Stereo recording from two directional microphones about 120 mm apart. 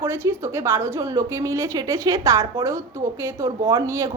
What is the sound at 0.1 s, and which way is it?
A woman's voice, 20° right (ahead or behind).